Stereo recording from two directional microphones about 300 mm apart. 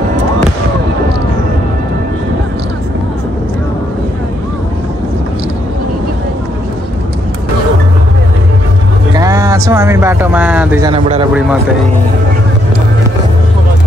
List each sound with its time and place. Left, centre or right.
9.1 s speech: centre
10.9 s speech: centre